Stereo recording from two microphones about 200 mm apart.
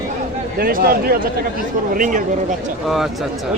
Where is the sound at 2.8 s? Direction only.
Centre (ahead or behind).